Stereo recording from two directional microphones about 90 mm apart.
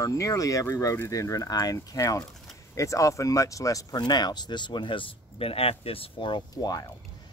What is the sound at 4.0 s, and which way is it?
Speech, 50° left (ahead or behind).